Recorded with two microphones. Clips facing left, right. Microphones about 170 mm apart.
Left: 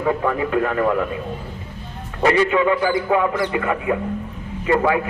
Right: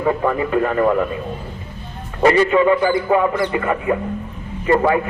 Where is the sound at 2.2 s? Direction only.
45° right (ahead or behind).